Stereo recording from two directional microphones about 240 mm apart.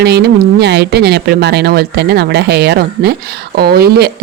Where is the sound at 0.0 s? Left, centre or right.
Right.